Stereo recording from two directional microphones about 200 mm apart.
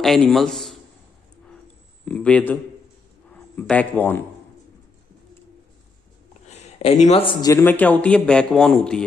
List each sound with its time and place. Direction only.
0.0 s a man's voice: centre (ahead or behind)
2.0 s a man's voice: 5° left (ahead or behind)
6.4 s a man's voice: 30° left (ahead or behind)
7.5 s a man's voice: 10° left (ahead or behind)